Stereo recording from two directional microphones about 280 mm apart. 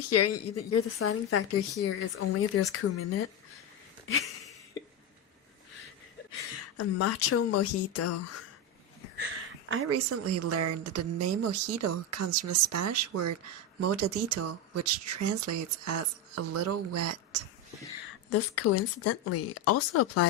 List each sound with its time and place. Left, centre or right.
0.1 s speech: left
6.7 s speech: left
9.6 s speech: right
13.8 s speech: right
18.3 s speech: left